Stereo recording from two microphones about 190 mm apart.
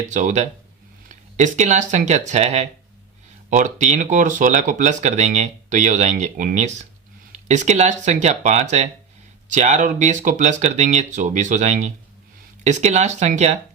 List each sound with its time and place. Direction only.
0.1 s speech: 40° right (ahead or behind)